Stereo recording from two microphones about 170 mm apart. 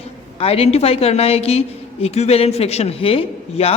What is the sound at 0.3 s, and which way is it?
A woman's voice, 35° left (ahead or behind).